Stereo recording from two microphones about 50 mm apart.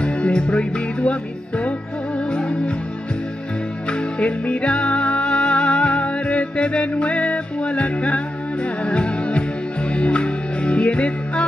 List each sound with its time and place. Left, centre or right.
0.0 s music: centre
2.1 s music: centre
3.9 s music: left